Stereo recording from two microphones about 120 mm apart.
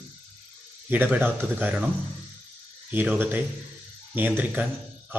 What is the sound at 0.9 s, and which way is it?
Speech, 15° right (ahead or behind).